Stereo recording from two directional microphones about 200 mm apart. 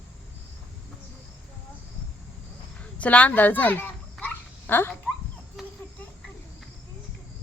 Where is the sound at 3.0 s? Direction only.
5° left (ahead or behind).